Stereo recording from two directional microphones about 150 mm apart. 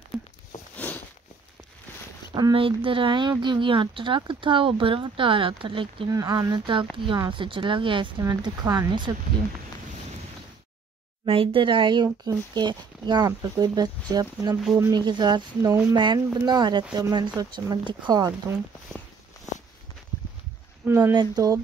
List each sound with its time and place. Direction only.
0.7 s a sound: 10° left (ahead or behind)
2.3 s speech: 30° right (ahead or behind)
11.2 s speech: 35° right (ahead or behind)
20.8 s speech: 15° right (ahead or behind)
21.1 s speech: 25° right (ahead or behind)